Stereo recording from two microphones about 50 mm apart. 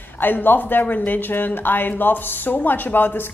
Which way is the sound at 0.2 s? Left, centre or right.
Left.